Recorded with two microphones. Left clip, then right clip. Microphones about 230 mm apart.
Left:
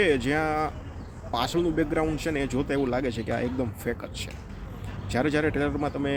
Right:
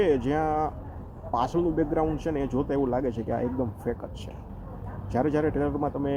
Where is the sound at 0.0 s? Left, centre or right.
Centre.